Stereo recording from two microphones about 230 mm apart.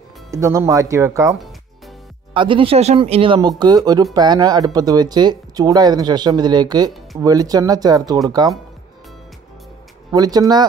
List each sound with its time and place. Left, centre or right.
0.3 s speech: centre
2.3 s speech: right
10.1 s speech: centre